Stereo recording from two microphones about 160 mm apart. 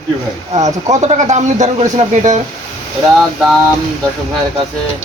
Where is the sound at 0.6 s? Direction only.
45° right (ahead or behind).